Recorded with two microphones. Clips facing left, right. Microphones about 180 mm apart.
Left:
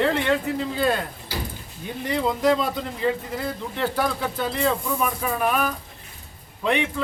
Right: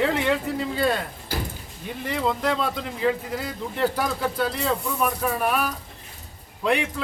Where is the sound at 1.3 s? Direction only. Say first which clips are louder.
Right 2 dB; 50° right (ahead or behind).